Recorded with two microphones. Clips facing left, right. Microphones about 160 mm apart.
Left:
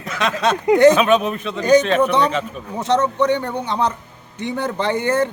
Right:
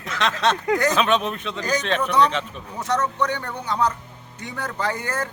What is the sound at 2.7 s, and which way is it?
Speech, 25° left (ahead or behind).